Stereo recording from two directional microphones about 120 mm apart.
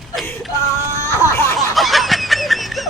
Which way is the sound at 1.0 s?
25° left (ahead or behind).